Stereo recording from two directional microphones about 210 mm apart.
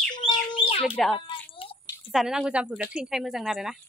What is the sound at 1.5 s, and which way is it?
Drip, 25° left (ahead or behind).